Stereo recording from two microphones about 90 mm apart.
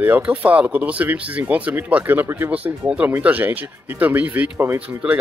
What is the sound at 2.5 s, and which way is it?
Speech, 15° right (ahead or behind).